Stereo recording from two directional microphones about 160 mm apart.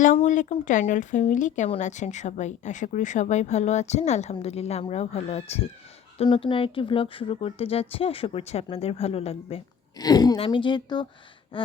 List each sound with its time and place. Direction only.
0.3 s a woman's voice: 50° left (ahead or behind)
10.0 s a woman's voice: 25° left (ahead or behind)